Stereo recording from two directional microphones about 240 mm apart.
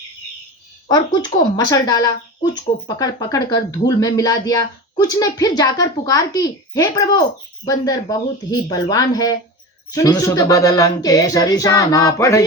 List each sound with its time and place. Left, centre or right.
0.9 s speech: centre